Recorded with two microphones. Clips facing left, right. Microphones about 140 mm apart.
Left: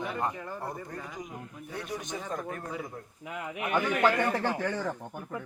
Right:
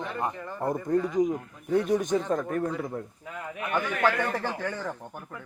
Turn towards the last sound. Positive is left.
turn(degrees=0)  # may be behind; listen again after turning